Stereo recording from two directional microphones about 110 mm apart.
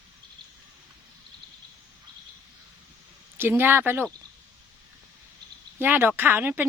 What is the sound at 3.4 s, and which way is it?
Speech, 20° right (ahead or behind).